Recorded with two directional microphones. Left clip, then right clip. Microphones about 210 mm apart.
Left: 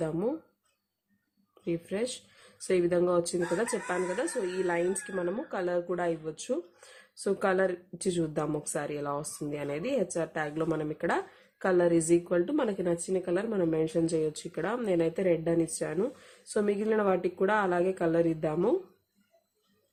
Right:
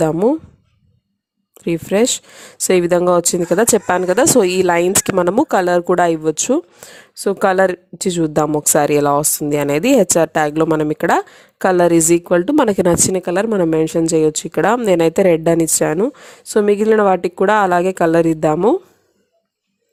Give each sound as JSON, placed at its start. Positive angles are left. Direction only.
{"t": 0.0, "sound": "a woman's voice", "side_deg": -50}
{"t": 1.6, "sound": "a woman's voice", "side_deg": -50}